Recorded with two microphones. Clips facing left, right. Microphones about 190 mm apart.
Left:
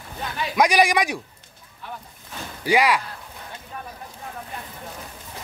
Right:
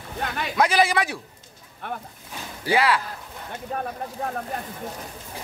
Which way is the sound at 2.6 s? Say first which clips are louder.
Left 1 dB; 15° left (ahead or behind).